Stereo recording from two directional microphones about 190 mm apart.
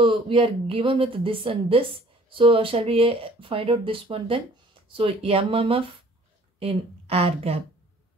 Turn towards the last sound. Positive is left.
turn(degrees=-30)  # may be behind; listen again after turning